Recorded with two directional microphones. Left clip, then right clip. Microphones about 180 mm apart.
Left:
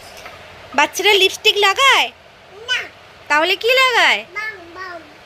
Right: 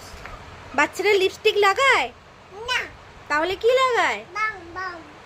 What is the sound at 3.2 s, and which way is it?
A woman's voice, centre (ahead or behind).